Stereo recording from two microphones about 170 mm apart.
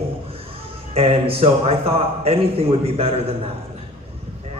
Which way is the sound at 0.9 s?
35° right (ahead or behind).